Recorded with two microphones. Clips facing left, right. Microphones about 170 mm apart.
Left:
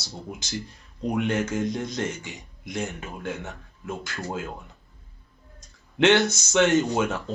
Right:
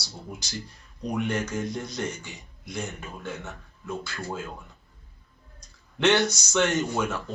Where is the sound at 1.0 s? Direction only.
20° left (ahead or behind).